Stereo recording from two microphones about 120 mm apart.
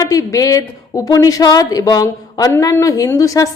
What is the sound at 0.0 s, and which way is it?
A woman's voice, 25° left (ahead or behind).